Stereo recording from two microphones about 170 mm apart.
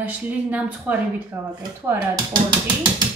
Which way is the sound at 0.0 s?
10° right (ahead or behind).